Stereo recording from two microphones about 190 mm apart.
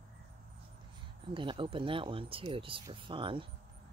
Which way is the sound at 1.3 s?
25° right (ahead or behind).